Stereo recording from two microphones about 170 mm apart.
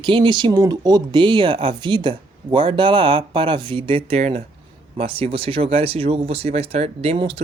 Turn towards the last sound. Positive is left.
turn(degrees=-35)  # may be behind; listen again after turning